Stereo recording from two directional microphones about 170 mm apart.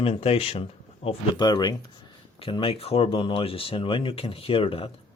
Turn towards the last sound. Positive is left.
turn(degrees=35)  # may be behind; listen again after turning